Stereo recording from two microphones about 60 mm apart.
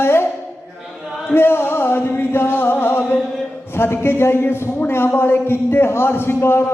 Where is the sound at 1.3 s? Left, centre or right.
Left.